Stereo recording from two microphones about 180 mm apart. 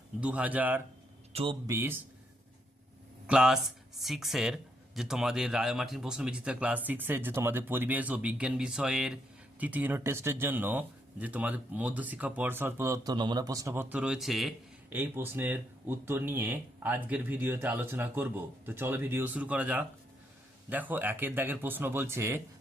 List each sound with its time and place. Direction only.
0.2 s speech: 10° right (ahead or behind)
1.3 s a man's voice: 30° right (ahead or behind)
1.6 s speech: 15° right (ahead or behind)
3.2 s speech: 5° right (ahead or behind)